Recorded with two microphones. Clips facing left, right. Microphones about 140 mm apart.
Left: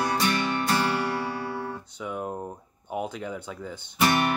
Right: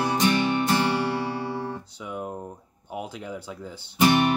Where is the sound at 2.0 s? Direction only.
5° right (ahead or behind).